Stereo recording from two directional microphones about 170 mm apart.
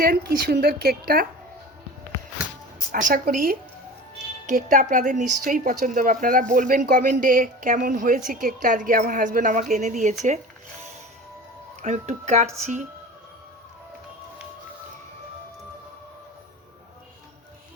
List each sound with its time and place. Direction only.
0.0 s a woman's voice: 60° right (ahead or behind)
2.9 s a woman's voice: 55° right (ahead or behind)
10.2 s a sound: 45° right (ahead or behind)
11.8 s speech: 45° right (ahead or behind)